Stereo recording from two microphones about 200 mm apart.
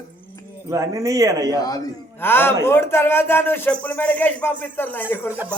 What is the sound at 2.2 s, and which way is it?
Speech, 10° left (ahead or behind).